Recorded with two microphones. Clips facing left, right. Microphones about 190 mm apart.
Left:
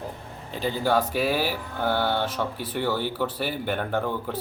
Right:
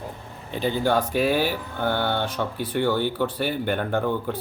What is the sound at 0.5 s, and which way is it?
Speech, centre (ahead or behind).